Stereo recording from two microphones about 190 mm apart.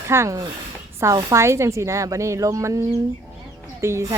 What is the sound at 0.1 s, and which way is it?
A woman's voice, 15° right (ahead or behind).